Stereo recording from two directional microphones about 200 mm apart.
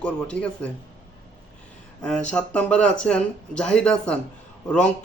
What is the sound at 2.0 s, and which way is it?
Speech, 5° left (ahead or behind).